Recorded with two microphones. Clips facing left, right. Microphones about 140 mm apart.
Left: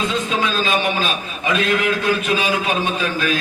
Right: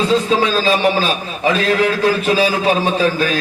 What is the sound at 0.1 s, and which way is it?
A man's voice, 35° right (ahead or behind).